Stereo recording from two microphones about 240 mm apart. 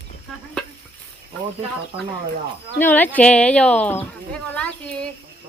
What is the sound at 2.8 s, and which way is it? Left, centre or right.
Speech, centre.